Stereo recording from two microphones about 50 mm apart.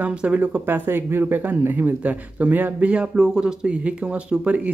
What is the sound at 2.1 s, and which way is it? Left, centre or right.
Speech, right.